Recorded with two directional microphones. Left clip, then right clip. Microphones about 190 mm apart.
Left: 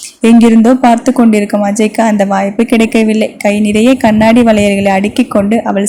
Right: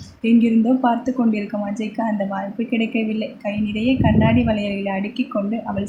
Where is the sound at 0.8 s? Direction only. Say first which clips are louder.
Left 11 dB; 50° left (ahead or behind).